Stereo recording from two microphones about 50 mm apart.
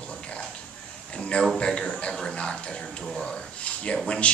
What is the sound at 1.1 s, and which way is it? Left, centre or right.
A man's voice, left.